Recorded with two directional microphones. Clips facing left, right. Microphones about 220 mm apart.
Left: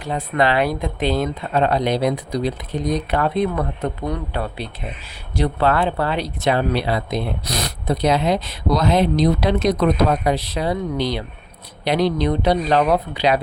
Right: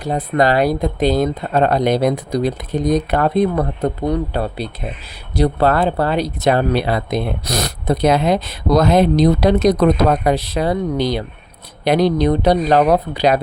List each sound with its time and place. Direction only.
0.0 s speech: 40° right (ahead or behind)